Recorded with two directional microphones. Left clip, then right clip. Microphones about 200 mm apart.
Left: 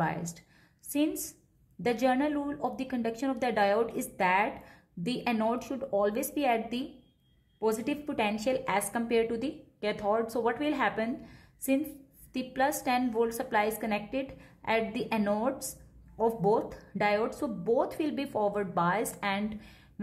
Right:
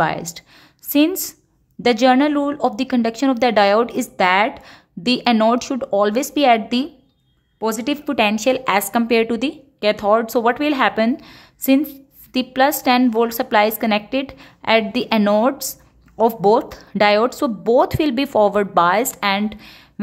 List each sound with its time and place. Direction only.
0.0 s speech: 40° right (ahead or behind)
1.8 s speech: 40° right (ahead or behind)